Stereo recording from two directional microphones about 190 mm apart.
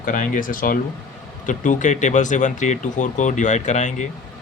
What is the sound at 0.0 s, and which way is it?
Speech, 45° left (ahead or behind).